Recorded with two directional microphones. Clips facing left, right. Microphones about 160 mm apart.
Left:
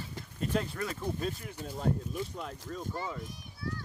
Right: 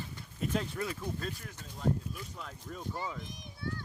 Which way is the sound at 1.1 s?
10° left (ahead or behind).